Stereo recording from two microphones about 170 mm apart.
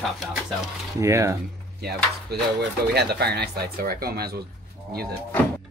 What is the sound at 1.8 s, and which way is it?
Speech, 70° right (ahead or behind).